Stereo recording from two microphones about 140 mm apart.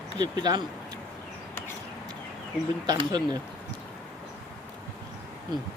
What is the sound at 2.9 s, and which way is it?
Speech, 30° right (ahead or behind).